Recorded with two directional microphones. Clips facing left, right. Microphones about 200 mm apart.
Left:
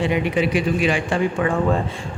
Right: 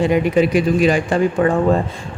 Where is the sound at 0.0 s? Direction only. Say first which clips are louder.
Right 5 dB; 45° right (ahead or behind).